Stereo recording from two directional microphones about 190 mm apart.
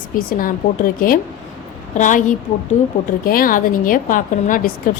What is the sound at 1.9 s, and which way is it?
A woman's voice, 40° left (ahead or behind).